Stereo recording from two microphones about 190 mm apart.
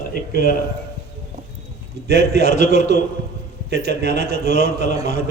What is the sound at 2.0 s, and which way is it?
A man's voice, 60° right (ahead or behind).